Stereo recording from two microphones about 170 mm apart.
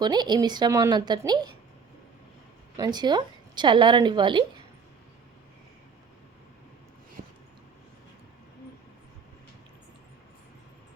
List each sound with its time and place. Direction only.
0.0 s a woman's voice: 25° right (ahead or behind)
2.7 s a woman's voice: 25° right (ahead or behind)
7.2 s a sound: 60° right (ahead or behind)